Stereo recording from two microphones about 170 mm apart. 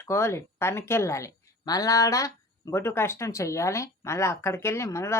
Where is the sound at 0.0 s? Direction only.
15° left (ahead or behind).